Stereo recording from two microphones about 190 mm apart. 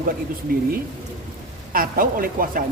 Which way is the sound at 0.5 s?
50° right (ahead or behind).